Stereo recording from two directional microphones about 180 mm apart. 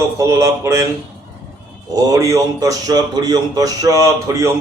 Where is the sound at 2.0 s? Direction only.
20° right (ahead or behind).